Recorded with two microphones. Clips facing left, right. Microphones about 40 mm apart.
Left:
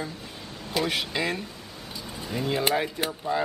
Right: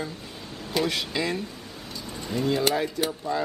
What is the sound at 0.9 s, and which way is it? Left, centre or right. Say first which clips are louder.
Speech: even; centre.